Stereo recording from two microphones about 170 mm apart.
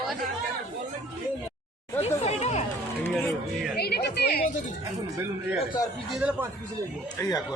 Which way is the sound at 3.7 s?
70° left (ahead or behind).